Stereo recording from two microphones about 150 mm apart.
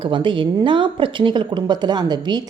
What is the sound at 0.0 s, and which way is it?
A woman's voice, 35° right (ahead or behind).